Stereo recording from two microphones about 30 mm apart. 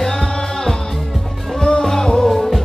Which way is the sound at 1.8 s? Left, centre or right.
Centre.